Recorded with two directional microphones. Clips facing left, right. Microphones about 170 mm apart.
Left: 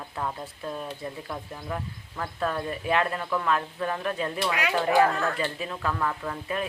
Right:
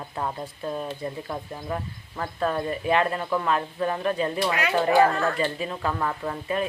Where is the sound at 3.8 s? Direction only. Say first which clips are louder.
Right 3 dB; 15° right (ahead or behind).